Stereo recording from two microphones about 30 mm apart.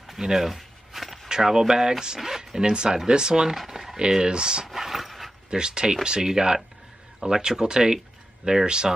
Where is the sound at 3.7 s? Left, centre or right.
Centre.